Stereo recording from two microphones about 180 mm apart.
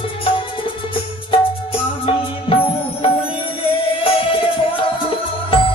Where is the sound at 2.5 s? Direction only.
30° left (ahead or behind).